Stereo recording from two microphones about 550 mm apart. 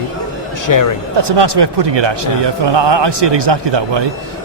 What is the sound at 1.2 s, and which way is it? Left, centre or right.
A man's voice, right.